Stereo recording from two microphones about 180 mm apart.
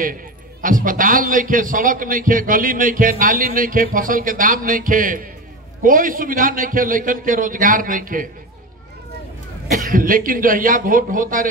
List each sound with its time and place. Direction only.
0.6 s a man's voice: 50° right (ahead or behind)
9.7 s a man's voice: 50° right (ahead or behind)